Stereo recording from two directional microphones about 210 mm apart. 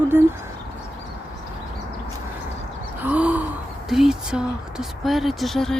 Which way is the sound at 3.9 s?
Centre (ahead or behind).